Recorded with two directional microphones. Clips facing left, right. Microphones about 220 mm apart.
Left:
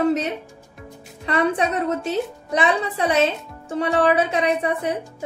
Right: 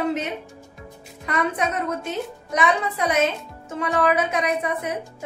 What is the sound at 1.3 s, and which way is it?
A woman's voice, 30° left (ahead or behind).